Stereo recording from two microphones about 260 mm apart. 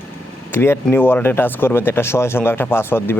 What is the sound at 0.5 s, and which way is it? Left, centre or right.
Speech, centre.